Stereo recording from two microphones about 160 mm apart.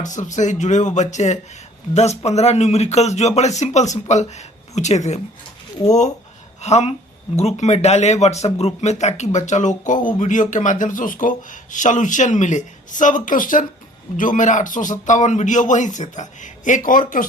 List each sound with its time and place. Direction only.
0.0 s speech: 50° left (ahead or behind)